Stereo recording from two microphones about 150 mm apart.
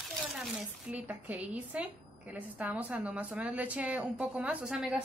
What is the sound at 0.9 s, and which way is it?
A woman's voice, 10° right (ahead or behind).